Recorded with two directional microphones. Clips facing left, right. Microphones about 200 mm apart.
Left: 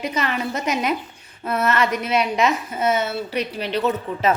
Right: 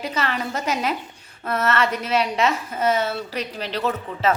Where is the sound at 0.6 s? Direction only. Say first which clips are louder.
Left 1 dB; 10° left (ahead or behind).